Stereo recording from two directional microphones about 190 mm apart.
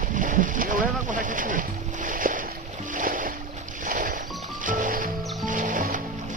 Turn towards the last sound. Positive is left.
turn(degrees=-45)  # may be behind; listen again after turning